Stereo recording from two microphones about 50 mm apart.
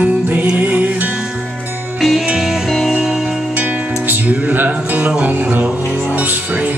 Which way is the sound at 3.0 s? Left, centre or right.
Centre.